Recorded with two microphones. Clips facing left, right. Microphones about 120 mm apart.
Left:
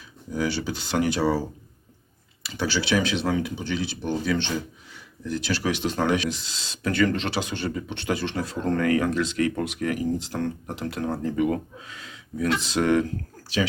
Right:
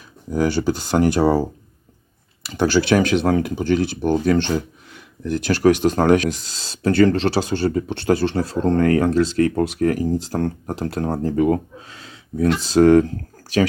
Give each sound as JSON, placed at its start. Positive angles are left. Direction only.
{"t": 0.3, "sound": "speech", "side_deg": -45}